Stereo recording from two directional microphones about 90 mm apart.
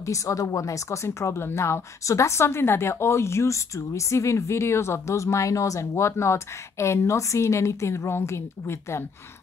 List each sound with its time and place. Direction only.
0.0 s a woman's voice: 35° left (ahead or behind)